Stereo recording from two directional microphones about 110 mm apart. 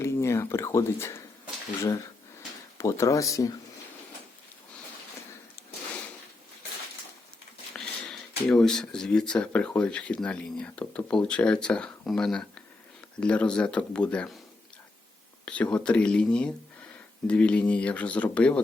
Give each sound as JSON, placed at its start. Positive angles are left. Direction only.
{"t": 0.0, "sound": "speech", "side_deg": 25}
{"t": 2.7, "sound": "speech", "side_deg": 30}
{"t": 7.8, "sound": "speech", "side_deg": 5}
{"t": 15.4, "sound": "speech", "side_deg": 10}